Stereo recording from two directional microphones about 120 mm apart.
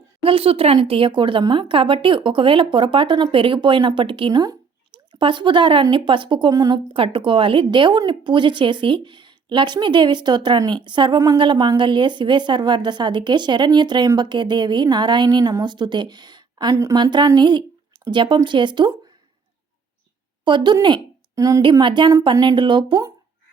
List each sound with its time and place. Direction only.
0.2 s speech: 50° right (ahead or behind)
6.5 s speech: 30° right (ahead or behind)
7.0 s speech: 45° right (ahead or behind)
16.7 s a woman's voice: 25° right (ahead or behind)
17.0 s speech: 40° right (ahead or behind)
20.4 s a woman's voice: 40° right (ahead or behind)
21.3 s a woman's voice: 25° right (ahead or behind)
21.6 s speech: 40° right (ahead or behind)